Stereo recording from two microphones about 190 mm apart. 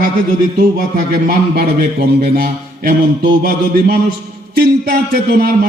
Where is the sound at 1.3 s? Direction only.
50° right (ahead or behind).